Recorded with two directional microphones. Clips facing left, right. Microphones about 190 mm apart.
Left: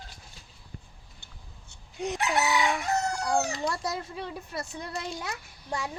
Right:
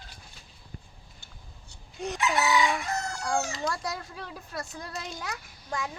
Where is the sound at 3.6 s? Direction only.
25° left (ahead or behind).